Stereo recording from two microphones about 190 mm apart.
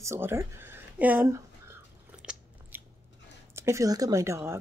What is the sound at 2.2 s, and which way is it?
Biting, 5° right (ahead or behind).